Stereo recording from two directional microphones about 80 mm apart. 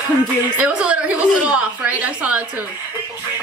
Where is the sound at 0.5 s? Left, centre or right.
Centre.